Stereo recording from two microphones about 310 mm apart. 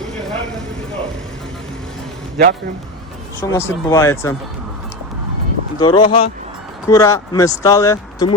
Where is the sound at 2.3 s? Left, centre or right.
Right.